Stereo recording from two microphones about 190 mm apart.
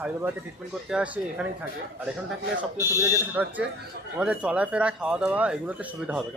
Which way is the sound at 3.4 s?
10° right (ahead or behind).